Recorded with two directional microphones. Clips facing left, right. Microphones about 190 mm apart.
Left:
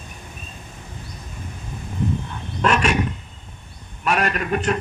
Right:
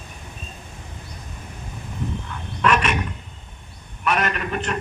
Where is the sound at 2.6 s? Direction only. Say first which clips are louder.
Even; 35° left (ahead or behind).